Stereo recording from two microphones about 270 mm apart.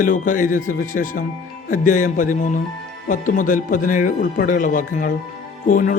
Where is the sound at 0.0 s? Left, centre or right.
Left.